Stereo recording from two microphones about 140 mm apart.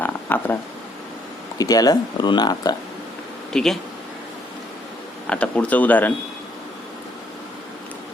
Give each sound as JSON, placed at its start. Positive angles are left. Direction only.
{"t": 0.0, "sound": "a sound", "side_deg": 15}
{"t": 1.5, "sound": "speech", "side_deg": 25}
{"t": 3.5, "sound": "speech", "side_deg": 5}
{"t": 5.3, "sound": "speech", "side_deg": 10}